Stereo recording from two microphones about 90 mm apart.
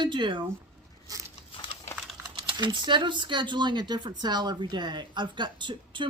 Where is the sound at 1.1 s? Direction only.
40° right (ahead or behind).